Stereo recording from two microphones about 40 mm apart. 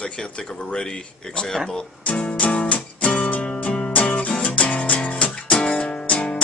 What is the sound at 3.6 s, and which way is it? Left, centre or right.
Music, left.